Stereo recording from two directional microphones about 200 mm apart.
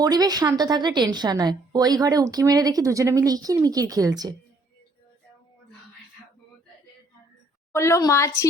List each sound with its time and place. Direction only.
0.0 s a woman's voice: 20° right (ahead or behind)
7.7 s a woman's voice: 15° left (ahead or behind)